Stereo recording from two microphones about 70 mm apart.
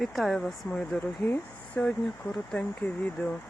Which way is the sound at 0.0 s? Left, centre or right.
Centre.